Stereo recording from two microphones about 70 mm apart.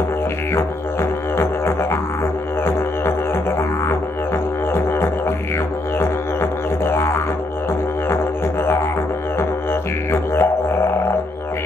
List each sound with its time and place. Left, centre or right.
1.4 s music: left
6.9 s music: left
10.1 s music: left